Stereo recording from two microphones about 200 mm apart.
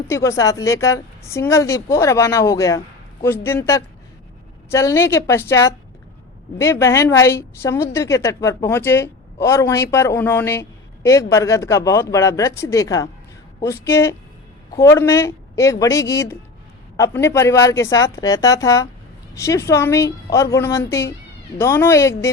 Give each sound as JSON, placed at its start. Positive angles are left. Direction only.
{"t": 0.1, "sound": "a woman's voice", "side_deg": 15}